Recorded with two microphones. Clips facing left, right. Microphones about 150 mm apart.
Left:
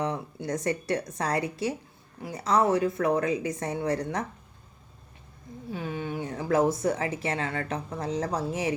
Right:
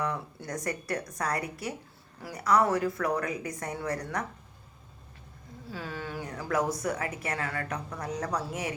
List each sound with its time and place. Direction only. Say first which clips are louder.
0.0 s a woman's voice: left 3 dB; 20° left (ahead or behind)
5.7 s a woman's voice: left 5 dB; 20° left (ahead or behind)